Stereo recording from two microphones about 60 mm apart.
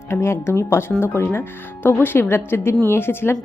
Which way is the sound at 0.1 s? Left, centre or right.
Left.